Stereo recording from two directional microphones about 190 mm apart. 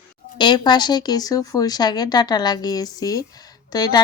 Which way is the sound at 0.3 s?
25° left (ahead or behind).